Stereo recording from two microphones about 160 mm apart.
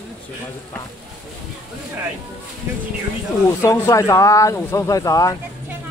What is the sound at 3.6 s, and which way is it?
Speech, 20° left (ahead or behind).